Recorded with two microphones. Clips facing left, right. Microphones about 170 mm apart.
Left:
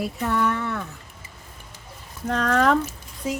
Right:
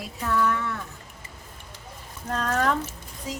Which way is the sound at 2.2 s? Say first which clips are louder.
Left 5 dB; 90° left.